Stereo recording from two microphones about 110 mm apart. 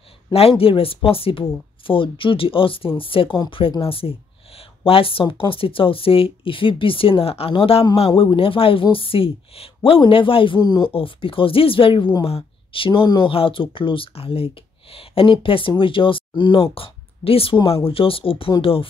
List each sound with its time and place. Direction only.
0.6 s speech: 55° left (ahead or behind)
10.9 s speech: 55° left (ahead or behind)
16.6 s speech: 60° left (ahead or behind)